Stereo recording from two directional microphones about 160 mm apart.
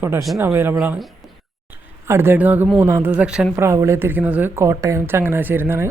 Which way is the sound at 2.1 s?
15° right (ahead or behind).